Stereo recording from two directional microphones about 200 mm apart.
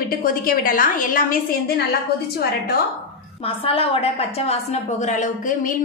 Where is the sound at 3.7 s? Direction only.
30° left (ahead or behind).